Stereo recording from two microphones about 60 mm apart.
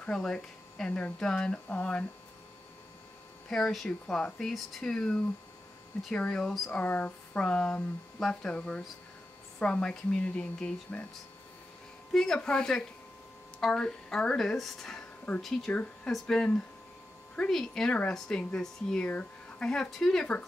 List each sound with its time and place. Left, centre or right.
0.0 s speech: centre
3.4 s speech: centre
12.1 s speech: centre
16.1 s speech: centre
17.5 s speech: centre
19.7 s speech: centre